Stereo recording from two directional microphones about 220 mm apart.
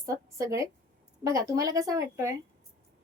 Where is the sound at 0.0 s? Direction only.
15° right (ahead or behind).